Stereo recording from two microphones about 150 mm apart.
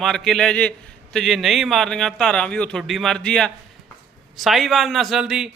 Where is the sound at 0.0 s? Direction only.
Centre (ahead or behind).